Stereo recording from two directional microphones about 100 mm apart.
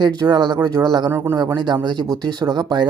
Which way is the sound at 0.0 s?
45° right (ahead or behind).